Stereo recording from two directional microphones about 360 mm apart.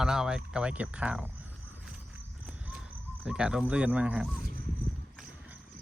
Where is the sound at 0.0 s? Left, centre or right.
Centre.